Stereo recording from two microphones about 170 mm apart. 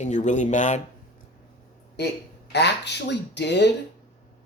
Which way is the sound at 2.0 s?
85° left.